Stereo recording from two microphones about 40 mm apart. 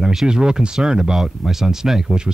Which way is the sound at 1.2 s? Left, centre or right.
Centre.